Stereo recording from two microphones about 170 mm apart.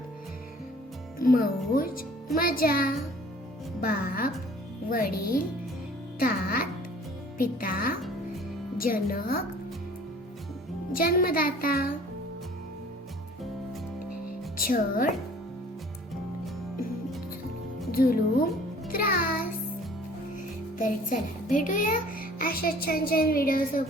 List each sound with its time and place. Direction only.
1.2 s a child's voice: 55° left (ahead or behind)
10.9 s a child's voice: 60° left (ahead or behind)
14.6 s a child's voice: 55° left (ahead or behind)
17.9 s a child's voice: 60° left (ahead or behind)
18.9 s music: 60° left (ahead or behind)
20.7 s a child's voice: 50° left (ahead or behind)